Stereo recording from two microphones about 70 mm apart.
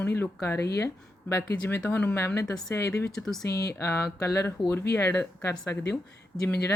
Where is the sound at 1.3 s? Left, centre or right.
Left.